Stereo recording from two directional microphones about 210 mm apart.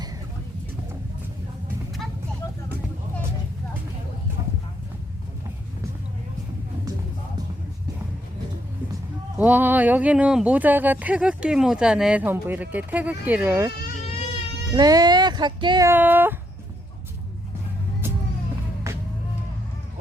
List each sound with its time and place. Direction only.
9.4 s speech: 10° right (ahead or behind)
14.8 s speech: 20° right (ahead or behind)
18.9 s music: 15° right (ahead or behind)